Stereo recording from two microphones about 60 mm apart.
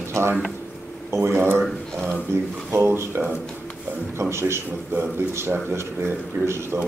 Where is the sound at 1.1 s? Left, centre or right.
Right.